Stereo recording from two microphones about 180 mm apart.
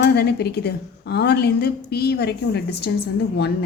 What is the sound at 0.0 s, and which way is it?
A woman's voice, 65° left (ahead or behind).